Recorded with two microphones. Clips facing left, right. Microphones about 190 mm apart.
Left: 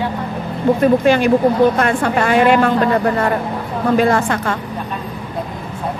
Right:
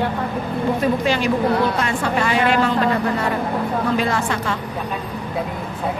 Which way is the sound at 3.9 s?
50° left (ahead or behind).